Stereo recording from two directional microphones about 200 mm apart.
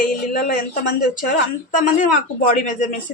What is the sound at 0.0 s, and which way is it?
Speech, 45° left (ahead or behind).